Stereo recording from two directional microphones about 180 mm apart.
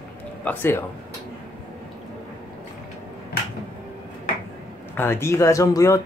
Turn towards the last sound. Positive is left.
turn(degrees=15)  # may be behind; listen again after turning